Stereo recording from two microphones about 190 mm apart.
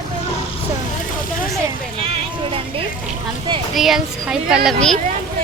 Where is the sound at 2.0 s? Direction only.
30° right (ahead or behind).